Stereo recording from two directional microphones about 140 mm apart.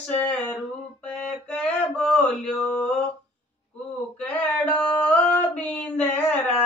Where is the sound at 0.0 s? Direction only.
10° left (ahead or behind).